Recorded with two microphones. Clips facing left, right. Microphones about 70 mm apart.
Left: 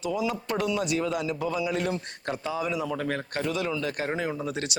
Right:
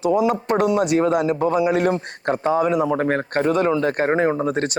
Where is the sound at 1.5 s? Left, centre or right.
Right.